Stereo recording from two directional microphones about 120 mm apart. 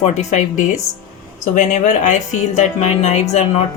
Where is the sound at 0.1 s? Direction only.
85° left; by 3.6 s 70° left (ahead or behind).